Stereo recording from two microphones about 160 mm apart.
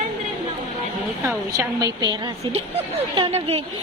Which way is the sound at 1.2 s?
20° right (ahead or behind).